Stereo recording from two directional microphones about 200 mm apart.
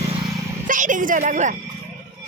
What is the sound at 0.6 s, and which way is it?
Speech, 40° right (ahead or behind).